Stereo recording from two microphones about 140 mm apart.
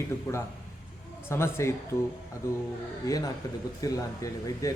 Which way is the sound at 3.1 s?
25° left (ahead or behind).